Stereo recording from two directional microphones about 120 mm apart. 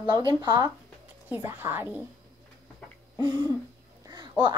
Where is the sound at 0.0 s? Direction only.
40° right (ahead or behind).